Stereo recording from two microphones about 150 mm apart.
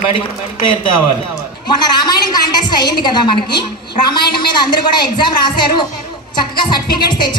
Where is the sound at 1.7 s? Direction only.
30° left (ahead or behind).